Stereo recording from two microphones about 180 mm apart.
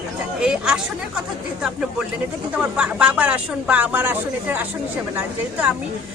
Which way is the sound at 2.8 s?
5° right (ahead or behind).